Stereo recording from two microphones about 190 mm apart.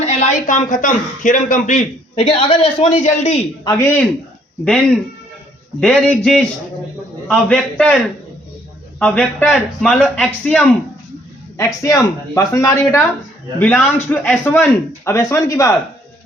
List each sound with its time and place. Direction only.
0.0 s speech: 35° left (ahead or behind)
3.6 s a man's voice: 15° left (ahead or behind)
5.8 s a man's voice: 5° left (ahead or behind)
9.0 s a man's voice: 5° left (ahead or behind)
11.5 s a man's voice: 15° left (ahead or behind)